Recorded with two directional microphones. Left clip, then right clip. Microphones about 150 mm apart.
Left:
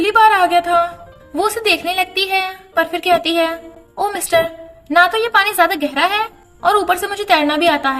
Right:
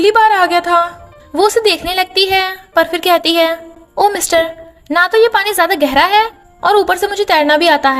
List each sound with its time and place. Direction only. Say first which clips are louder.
0.0 s a woman's voice: right 2 dB; 40° right (ahead or behind)